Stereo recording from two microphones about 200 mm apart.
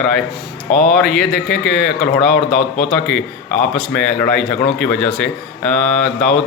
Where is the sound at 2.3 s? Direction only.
45° left (ahead or behind).